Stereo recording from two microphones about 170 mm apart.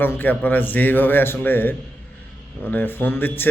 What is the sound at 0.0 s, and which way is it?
A man's voice, 10° left (ahead or behind).